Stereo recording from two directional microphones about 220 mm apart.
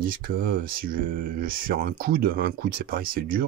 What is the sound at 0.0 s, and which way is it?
Speech, 40° right (ahead or behind).